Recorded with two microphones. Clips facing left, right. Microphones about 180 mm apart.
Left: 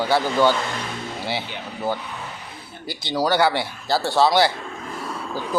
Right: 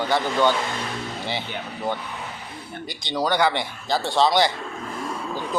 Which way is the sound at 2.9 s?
5° left (ahead or behind).